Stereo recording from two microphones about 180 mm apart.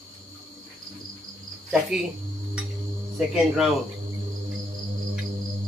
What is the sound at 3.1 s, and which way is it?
Speech, centre (ahead or behind).